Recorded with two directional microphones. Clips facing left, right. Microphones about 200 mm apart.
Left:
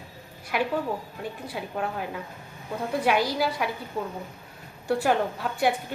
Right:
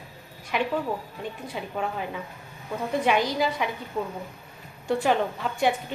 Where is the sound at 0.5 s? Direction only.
5° left (ahead or behind).